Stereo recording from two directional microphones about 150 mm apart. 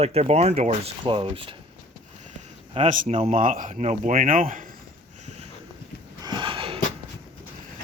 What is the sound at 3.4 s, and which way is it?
Speech, 60° right (ahead or behind).